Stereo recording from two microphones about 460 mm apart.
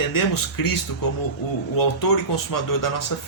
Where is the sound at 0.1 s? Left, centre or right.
Left.